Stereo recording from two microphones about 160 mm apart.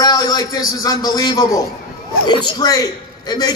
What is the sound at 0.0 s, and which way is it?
A man's voice, 25° left (ahead or behind).